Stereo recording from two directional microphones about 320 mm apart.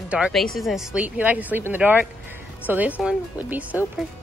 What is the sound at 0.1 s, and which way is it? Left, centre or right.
Speech, centre.